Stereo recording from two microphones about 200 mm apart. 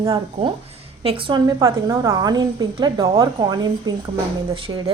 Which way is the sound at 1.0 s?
25° right (ahead or behind).